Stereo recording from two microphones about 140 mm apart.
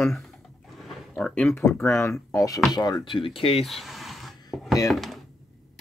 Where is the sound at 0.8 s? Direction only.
Centre (ahead or behind).